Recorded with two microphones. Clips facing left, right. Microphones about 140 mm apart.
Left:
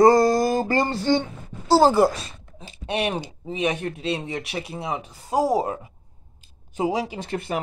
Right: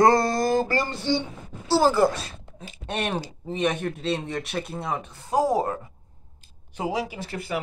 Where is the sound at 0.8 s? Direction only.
45° left (ahead or behind).